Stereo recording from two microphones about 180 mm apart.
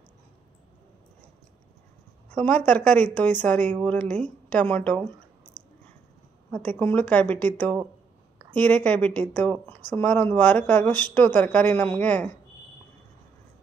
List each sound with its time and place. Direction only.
2.3 s speech: 5° left (ahead or behind)
5.5 s a sound: 50° left (ahead or behind)
6.5 s speech: 10° left (ahead or behind)